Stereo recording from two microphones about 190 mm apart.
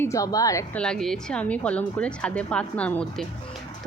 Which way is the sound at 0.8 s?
5° left (ahead or behind).